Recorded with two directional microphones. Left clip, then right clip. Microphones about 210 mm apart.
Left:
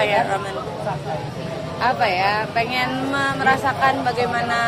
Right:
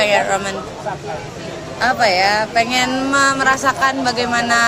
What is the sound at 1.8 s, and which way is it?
Speech, 60° right (ahead or behind).